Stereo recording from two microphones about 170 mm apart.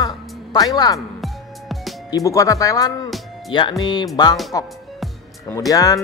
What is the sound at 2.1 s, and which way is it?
Speech, 20° left (ahead or behind).